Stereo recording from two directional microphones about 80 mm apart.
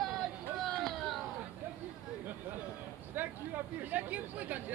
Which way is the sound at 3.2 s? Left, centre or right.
Right.